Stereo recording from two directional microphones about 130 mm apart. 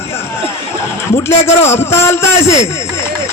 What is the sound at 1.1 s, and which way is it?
Speech, 20° left (ahead or behind).